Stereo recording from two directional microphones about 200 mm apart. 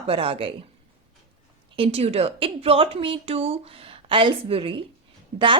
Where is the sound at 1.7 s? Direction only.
30° right (ahead or behind).